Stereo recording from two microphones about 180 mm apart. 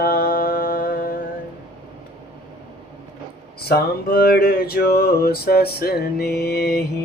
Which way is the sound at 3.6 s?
60° left (ahead or behind).